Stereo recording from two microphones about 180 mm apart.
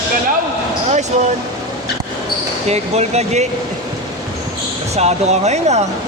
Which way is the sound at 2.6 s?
35° right (ahead or behind).